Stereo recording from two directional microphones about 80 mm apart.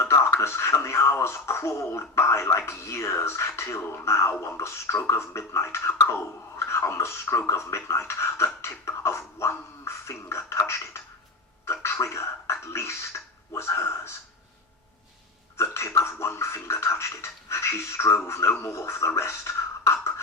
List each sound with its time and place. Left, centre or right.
0.0 s speech: left
15.5 s speech: left